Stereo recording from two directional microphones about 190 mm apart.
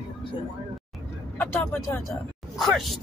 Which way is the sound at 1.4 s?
10° left (ahead or behind).